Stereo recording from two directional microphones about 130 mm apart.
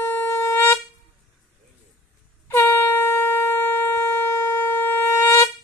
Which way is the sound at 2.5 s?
15° left (ahead or behind).